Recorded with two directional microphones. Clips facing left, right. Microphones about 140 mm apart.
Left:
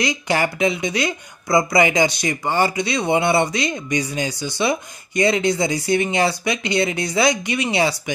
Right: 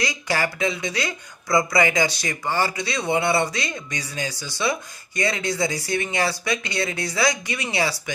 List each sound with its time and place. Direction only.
0.0 s speech: 20° left (ahead or behind)